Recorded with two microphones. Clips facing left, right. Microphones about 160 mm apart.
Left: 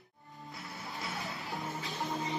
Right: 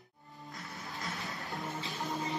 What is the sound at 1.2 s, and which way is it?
Music, centre (ahead or behind).